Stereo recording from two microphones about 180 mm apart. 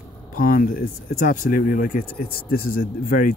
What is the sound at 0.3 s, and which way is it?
Speech, 55° left (ahead or behind).